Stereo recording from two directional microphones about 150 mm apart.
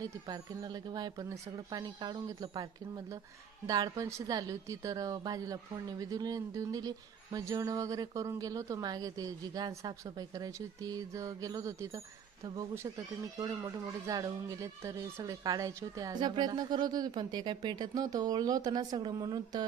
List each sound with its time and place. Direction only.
0.0 s speech: 25° right (ahead or behind)